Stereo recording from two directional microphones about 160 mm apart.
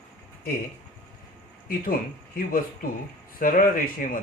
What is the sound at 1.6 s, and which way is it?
Speech, 65° left (ahead or behind).